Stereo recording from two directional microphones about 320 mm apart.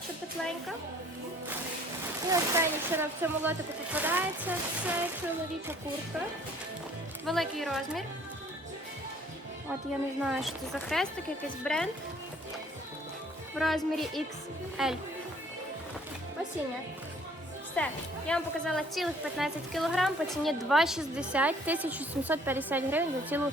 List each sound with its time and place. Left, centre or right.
2.2 s a woman's voice: centre
7.3 s a woman's voice: centre
10.2 s a woman's voice: centre
13.6 s a woman's voice: centre
17.8 s a woman's voice: centre